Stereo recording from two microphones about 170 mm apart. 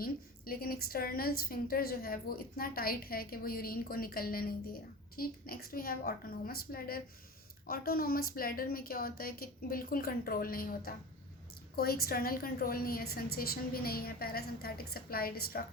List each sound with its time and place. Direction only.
0.0 s a woman's voice: 60° left (ahead or behind)